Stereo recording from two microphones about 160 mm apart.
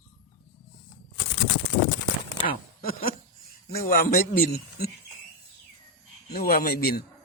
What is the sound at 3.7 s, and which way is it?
A man's voice, 65° left (ahead or behind).